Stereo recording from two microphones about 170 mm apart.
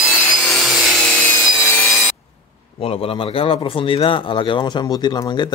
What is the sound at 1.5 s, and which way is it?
Wood, 15° left (ahead or behind).